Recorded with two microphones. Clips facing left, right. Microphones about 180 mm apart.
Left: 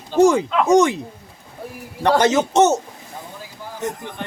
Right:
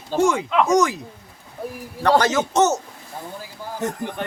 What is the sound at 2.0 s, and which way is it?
Speech, 20° left (ahead or behind).